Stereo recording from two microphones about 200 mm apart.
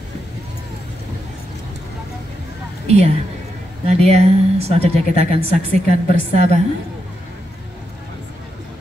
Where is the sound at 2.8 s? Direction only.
30° right (ahead or behind).